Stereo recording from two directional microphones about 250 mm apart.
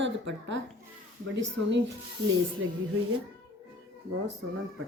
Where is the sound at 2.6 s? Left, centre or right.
Right.